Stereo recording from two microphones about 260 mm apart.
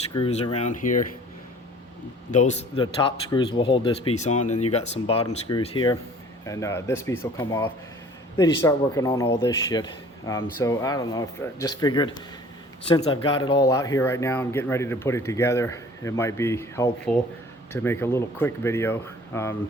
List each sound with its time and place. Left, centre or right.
0.1 s a man's voice: left
2.3 s a man's voice: left; by 19.5 s centre